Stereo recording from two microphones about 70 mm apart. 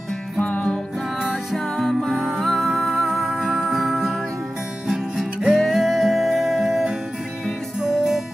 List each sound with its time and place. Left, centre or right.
0.4 s music: centre
1.2 s music: centre